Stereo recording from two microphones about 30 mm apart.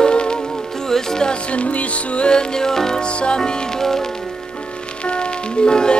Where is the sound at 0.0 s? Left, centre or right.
Left.